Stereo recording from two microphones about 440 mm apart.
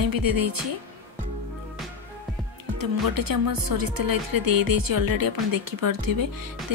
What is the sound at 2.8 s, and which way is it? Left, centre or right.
Speech, right.